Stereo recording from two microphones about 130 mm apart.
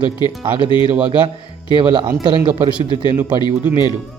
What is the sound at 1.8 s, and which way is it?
Speech, 40° right (ahead or behind).